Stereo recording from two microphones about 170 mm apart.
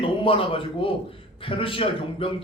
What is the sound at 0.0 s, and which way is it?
A man's voice, 30° left (ahead or behind).